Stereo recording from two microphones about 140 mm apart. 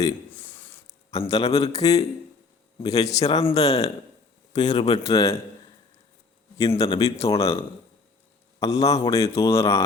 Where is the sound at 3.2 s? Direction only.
50° left (ahead or behind).